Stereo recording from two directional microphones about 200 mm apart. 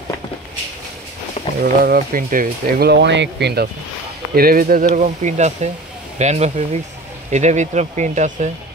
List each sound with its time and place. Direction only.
1.6 s speech: 45° right (ahead or behind)